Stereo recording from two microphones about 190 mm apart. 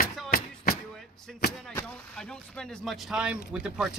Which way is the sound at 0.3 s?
50° left (ahead or behind).